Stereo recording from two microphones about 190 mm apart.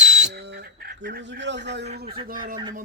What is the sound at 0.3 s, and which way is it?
Bird, 60° right (ahead or behind).